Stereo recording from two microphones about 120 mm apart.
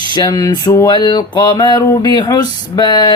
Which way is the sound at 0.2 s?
30° left (ahead or behind).